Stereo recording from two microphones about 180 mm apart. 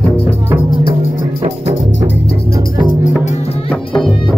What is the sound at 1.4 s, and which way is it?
Music, 35° right (ahead or behind).